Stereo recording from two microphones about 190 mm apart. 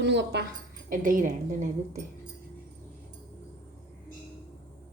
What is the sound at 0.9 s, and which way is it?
A woman's voice, 45° right (ahead or behind).